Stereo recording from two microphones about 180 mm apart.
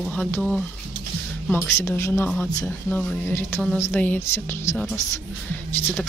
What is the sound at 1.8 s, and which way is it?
Speech, 15° left (ahead or behind).